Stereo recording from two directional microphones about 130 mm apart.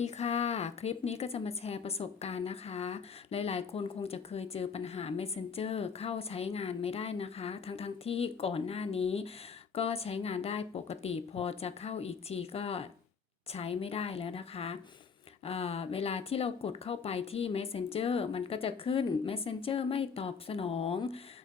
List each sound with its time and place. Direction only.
0.0 s a woman's voice: 55° left (ahead or behind)